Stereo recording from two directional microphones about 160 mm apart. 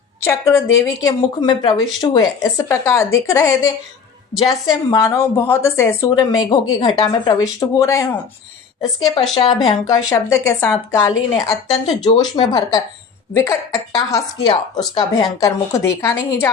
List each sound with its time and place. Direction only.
0.2 s speech: 15° left (ahead or behind)
9.3 s speech: 40° left (ahead or behind)
9.6 s a woman's voice: 20° left (ahead or behind)